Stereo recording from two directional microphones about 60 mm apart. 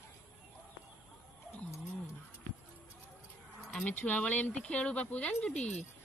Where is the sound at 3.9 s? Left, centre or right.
Left.